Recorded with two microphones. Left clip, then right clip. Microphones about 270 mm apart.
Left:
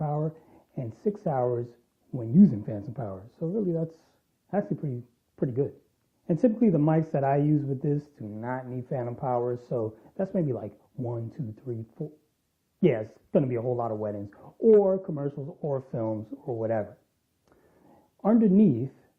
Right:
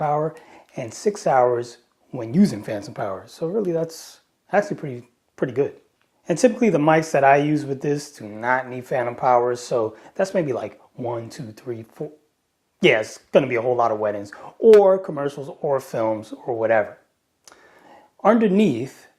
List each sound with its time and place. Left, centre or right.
0.0 s a sound: centre
1.2 s speech: centre
3.9 s speech: centre
12.8 s speech: centre
15.4 s speech: centre
17.4 s a sound: centre